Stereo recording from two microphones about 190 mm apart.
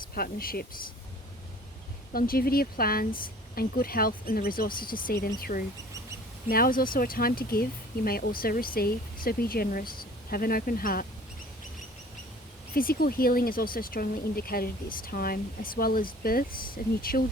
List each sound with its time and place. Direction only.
0.0 s speech: 50° left (ahead or behind)
2.1 s speech: 50° left (ahead or behind)
12.7 s speech: 50° left (ahead or behind)